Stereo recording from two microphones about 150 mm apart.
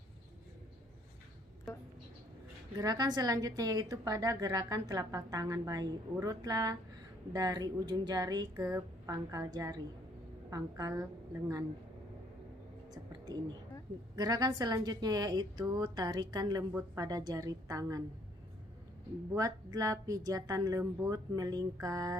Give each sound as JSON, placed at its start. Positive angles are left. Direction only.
{"t": 2.7, "sound": "a woman's voice", "side_deg": -25}
{"t": 14.2, "sound": "a woman's voice", "side_deg": -25}
{"t": 19.3, "sound": "a woman's voice", "side_deg": -20}